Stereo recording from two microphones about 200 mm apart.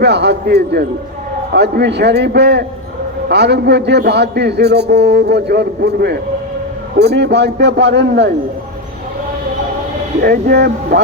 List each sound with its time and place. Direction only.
0.0 s a man's voice: 55° right (ahead or behind)
10.2 s speech: 50° right (ahead or behind)